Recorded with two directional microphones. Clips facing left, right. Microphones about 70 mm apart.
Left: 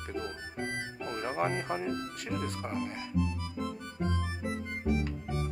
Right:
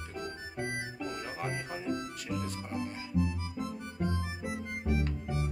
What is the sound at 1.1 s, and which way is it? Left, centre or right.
Speech, left.